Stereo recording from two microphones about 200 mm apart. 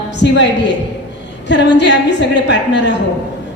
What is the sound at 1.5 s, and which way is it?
A woman's voice, 60° left (ahead or behind).